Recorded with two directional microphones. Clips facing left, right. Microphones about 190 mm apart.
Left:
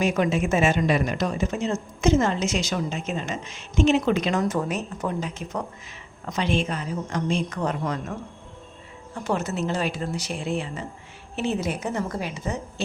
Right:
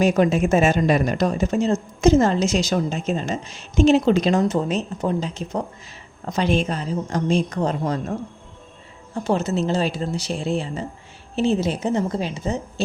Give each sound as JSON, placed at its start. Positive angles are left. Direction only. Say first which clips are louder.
{"t": 0.0, "sound": "speech", "louder": "right 5 dB", "side_deg": -40}
{"t": 9.1, "sound": "speech", "louder": "right 5 dB", "side_deg": -30}